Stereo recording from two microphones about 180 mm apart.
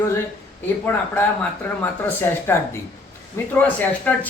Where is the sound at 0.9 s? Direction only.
10° left (ahead or behind).